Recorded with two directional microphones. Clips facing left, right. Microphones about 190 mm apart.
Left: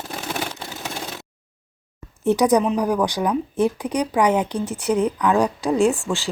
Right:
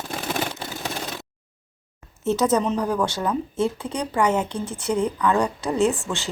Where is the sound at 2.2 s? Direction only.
15° left (ahead or behind).